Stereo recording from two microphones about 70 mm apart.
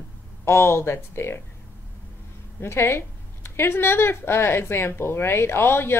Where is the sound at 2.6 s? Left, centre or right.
Left.